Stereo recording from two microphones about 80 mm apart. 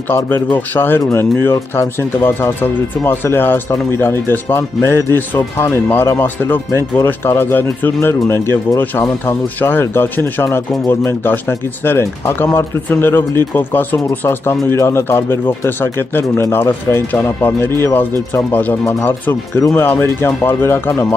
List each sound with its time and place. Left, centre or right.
0.1 s speech: left
18.9 s speech: left